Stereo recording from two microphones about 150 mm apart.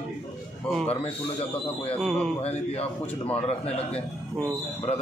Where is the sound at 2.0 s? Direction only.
5° left (ahead or behind).